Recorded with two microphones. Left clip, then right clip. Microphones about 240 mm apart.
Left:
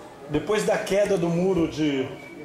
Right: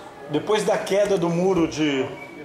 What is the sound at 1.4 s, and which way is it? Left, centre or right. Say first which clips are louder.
Speech: right 3 dB; right.